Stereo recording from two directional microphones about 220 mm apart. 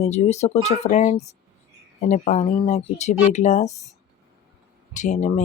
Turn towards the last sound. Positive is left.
turn(degrees=35)  # may be behind; listen again after turning